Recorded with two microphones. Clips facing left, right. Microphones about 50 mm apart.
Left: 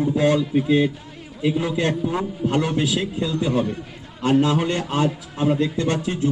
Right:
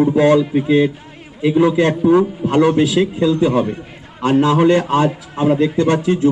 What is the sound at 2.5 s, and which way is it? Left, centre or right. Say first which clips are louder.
A man's voice: right 6 dB; right.